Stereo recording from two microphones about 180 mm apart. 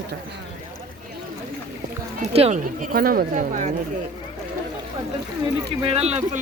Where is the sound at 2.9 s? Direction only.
55° right (ahead or behind).